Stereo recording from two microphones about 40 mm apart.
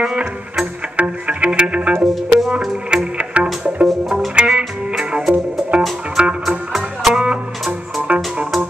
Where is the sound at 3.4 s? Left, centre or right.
Right.